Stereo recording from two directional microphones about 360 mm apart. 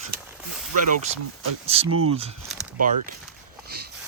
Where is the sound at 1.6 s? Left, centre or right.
Centre.